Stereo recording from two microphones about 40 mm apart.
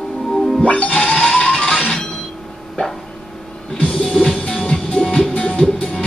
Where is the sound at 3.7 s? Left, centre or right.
Left.